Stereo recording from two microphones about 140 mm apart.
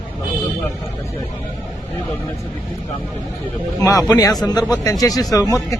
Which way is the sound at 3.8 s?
25° left (ahead or behind).